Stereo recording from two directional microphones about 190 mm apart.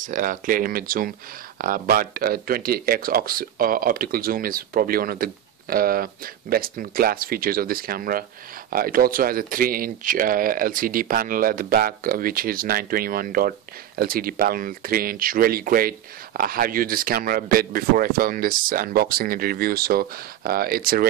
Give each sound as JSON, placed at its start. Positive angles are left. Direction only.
{"t": 0.0, "sound": "speech", "side_deg": -45}